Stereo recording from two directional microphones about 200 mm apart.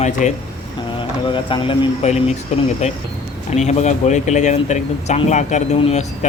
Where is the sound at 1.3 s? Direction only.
25° left (ahead or behind).